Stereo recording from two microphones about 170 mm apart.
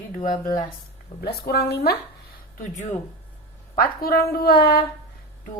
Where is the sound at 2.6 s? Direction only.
45° left (ahead or behind).